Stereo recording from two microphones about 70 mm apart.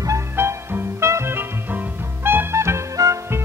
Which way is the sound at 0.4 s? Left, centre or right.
Right.